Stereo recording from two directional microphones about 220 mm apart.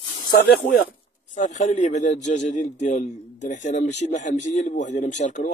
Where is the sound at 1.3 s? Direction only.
35° left (ahead or behind).